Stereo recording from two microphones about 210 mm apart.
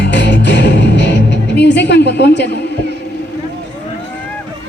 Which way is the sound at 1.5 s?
55° left (ahead or behind).